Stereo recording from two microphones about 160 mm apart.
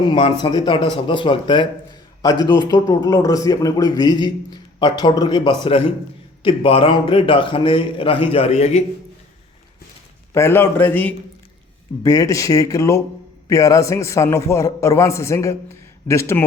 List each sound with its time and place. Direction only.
0.0 s a man's voice: 30° left (ahead or behind)
2.6 s a man's voice: 20° left (ahead or behind); by 8.8 s 45° left (ahead or behind)
10.3 s a man's voice: 15° left (ahead or behind)